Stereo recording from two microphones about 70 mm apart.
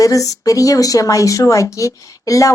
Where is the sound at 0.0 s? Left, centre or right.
Left.